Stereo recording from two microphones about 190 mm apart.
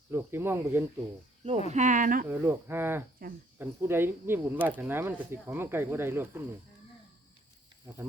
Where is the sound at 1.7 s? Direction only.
40° right (ahead or behind).